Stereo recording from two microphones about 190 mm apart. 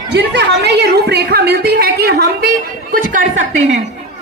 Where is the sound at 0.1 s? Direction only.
65° right (ahead or behind); by 3.8 s 40° right (ahead or behind).